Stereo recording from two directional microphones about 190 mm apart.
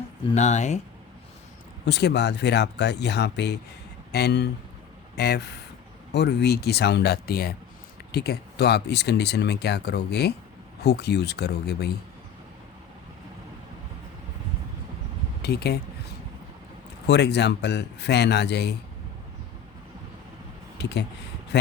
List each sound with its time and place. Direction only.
0.3 s speech: 40° left (ahead or behind)
1.9 s speech: 60° left (ahead or behind)
15.4 s speech: 55° left (ahead or behind)
17.1 s speech: 65° left (ahead or behind)
20.8 s speech: 60° left (ahead or behind)